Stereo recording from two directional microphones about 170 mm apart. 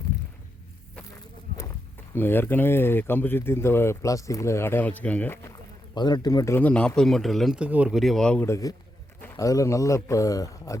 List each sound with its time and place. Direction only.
1.5 s walk: 55° right (ahead or behind)
2.1 s speech: 10° left (ahead or behind)
8.4 s speech: 20° left (ahead or behind)